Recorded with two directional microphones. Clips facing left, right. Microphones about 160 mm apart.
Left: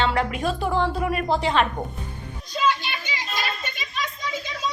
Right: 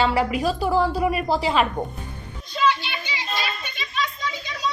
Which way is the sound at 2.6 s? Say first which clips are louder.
Right 2 dB; 45° left (ahead or behind).